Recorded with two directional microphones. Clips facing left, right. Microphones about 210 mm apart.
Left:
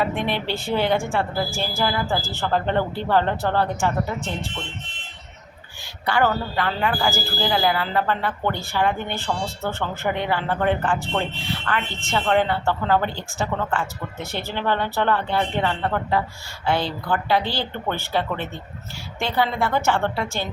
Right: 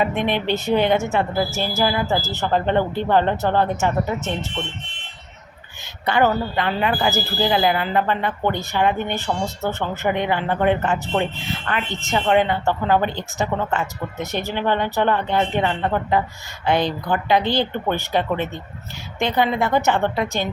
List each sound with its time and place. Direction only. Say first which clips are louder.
0.0 s a man's voice: right 3 dB; 20° right (ahead or behind)
6.1 s a man's voice: right 3 dB; 20° right (ahead or behind)